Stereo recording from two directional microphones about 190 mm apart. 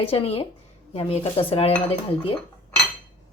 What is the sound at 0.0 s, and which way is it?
Speech, 30° left (ahead or behind).